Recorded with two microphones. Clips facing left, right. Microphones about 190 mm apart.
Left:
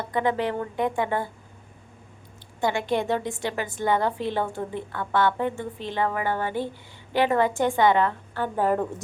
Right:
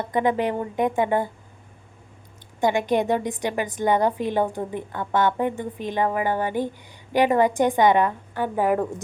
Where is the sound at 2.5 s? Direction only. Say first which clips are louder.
Right 4 dB; 15° right (ahead or behind).